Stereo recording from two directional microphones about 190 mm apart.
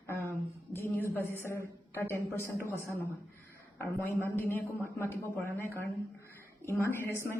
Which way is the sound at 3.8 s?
15° left (ahead or behind).